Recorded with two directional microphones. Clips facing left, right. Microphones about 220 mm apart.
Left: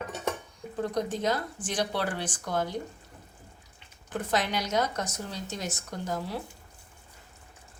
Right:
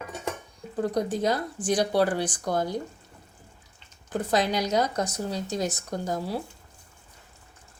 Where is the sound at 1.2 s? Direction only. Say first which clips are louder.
Right 3 dB; 35° right (ahead or behind).